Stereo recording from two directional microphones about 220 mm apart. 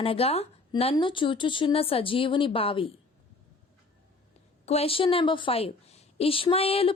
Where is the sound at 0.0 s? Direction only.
25° left (ahead or behind).